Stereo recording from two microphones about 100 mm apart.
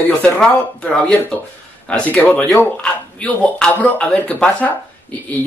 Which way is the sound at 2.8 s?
10° left (ahead or behind).